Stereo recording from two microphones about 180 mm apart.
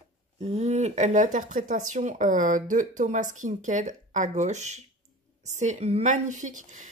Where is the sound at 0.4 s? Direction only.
35° right (ahead or behind).